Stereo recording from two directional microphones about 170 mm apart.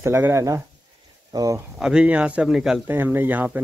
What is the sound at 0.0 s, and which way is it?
Speech, 15° right (ahead or behind).